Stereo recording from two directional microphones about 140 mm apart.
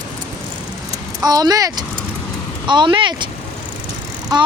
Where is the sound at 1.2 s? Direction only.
30° right (ahead or behind).